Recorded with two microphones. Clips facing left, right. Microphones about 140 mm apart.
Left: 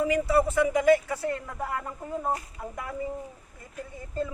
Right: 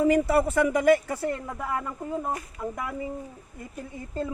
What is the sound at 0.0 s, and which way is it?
Speech, 50° right (ahead or behind).